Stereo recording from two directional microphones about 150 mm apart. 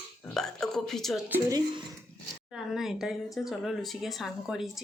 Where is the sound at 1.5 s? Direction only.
25° right (ahead or behind).